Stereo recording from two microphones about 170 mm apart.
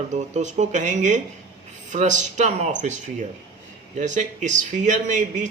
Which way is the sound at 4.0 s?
45° right (ahead or behind).